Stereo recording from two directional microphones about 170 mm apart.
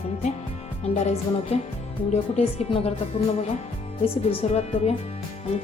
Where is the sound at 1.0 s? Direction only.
40° left (ahead or behind).